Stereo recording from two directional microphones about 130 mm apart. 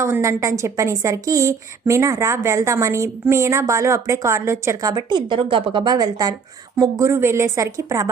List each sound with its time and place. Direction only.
0.0 s a woman's voice: 20° right (ahead or behind)